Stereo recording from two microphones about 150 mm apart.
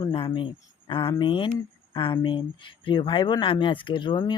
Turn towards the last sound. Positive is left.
turn(degrees=30)  # may be behind; listen again after turning